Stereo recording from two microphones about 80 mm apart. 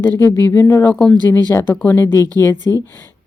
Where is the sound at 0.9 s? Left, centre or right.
Centre.